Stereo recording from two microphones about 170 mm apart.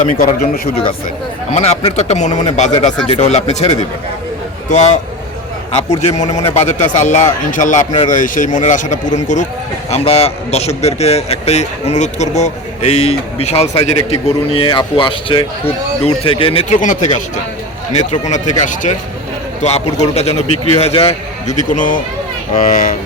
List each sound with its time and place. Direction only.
0.0 s speech: 50° left (ahead or behind)
1.5 s a man's voice: 40° left (ahead or behind)
6.0 s a man's voice: 40° left (ahead or behind)